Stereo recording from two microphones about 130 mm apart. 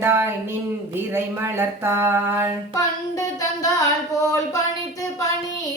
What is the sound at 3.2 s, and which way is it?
Speech, 25° left (ahead or behind).